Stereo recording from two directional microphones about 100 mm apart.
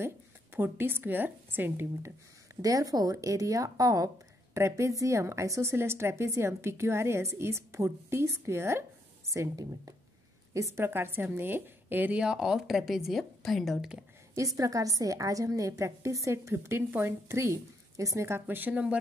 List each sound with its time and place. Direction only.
0.6 s a woman's voice: 20° right (ahead or behind)
2.6 s a woman's voice: 35° right (ahead or behind); by 14.0 s 5° right (ahead or behind)
14.3 s a woman's voice: 35° right (ahead or behind); by 18.9 s 15° right (ahead or behind)